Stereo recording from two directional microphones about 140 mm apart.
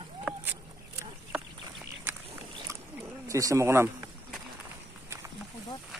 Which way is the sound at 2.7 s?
20° right (ahead or behind).